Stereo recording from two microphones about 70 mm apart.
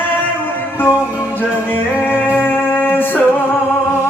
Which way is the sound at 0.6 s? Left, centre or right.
Left.